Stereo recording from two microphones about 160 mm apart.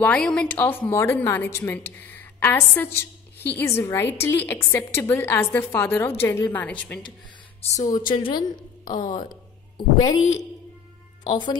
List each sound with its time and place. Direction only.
0.0 s a woman's voice: 5° left (ahead or behind)
7.7 s a woman's voice: 25° left (ahead or behind)
9.0 s speech: 50° left (ahead or behind)
9.3 s music: 25° left (ahead or behind)